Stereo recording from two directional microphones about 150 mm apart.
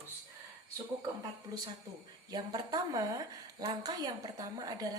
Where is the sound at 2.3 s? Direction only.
25° right (ahead or behind).